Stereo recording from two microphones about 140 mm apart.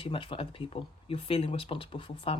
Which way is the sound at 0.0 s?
40° left (ahead or behind).